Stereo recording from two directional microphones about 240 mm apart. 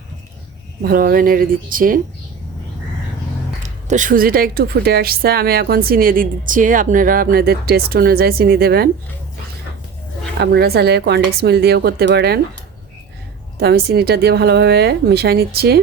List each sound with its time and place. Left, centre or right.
0.8 s a woman's voice: right
3.6 s a woman's voice: right
10.4 s a woman's voice: right
13.6 s a woman's voice: right